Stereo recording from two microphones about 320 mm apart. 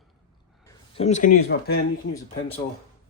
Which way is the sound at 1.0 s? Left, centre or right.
Left.